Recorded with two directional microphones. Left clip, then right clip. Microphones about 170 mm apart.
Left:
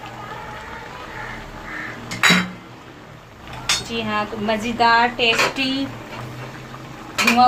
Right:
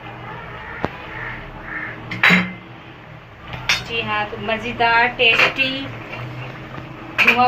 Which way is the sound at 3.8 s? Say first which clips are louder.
Right 2 dB; 60° left (ahead or behind).